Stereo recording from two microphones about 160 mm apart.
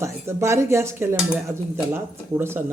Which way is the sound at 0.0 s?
15° right (ahead or behind).